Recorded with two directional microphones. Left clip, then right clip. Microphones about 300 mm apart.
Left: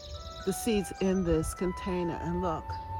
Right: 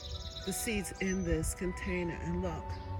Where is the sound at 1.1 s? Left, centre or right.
Left.